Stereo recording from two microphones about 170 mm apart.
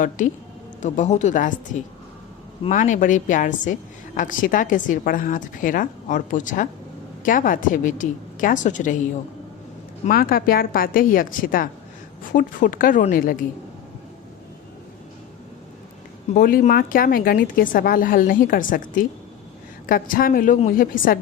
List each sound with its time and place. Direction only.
0.2 s a woman's voice: 50° left (ahead or behind)
2.6 s a woman's voice: 45° left (ahead or behind)
10.1 s speech: 60° left (ahead or behind)
16.3 s speech: 60° left (ahead or behind)